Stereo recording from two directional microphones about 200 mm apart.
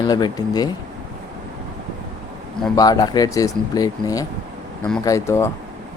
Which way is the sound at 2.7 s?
20° left (ahead or behind).